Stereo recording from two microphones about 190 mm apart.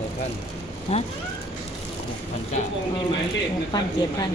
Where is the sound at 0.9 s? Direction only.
35° left (ahead or behind).